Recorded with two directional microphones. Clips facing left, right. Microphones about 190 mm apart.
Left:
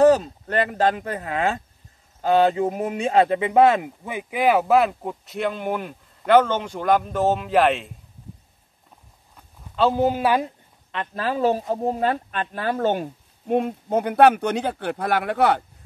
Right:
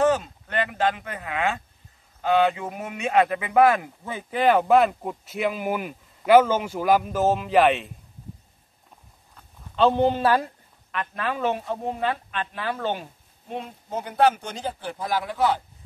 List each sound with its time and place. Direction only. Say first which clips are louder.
0.0 s speech: left 6 dB; 35° left (ahead or behind); by 7.9 s centre (ahead or behind)
9.8 s a woman's voice: even; 5° left (ahead or behind)
10.9 s speech: left 3 dB; 30° left (ahead or behind); by 15.6 s 65° left (ahead or behind)